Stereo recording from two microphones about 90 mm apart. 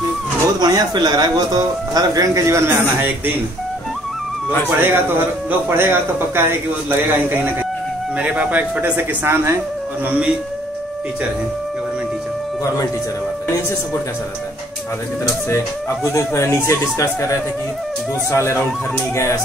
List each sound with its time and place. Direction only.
0.6 s speech: 50° right (ahead or behind)
4.6 s a man's voice: 25° right (ahead or behind)
9.2 s a man's voice: 30° right (ahead or behind)
10.0 s a man's voice: 15° right (ahead or behind)
15.5 s speech: 35° left (ahead or behind)